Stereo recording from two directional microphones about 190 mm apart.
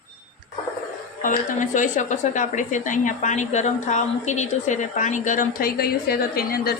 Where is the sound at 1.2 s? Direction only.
40° left (ahead or behind).